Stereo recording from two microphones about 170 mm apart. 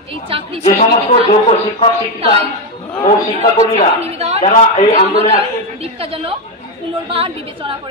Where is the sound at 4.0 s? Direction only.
40° right (ahead or behind).